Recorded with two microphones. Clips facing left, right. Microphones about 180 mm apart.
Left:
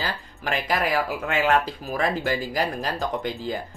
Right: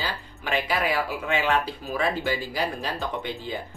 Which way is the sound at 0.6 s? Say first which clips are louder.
Left 4 dB; 45° left (ahead or behind).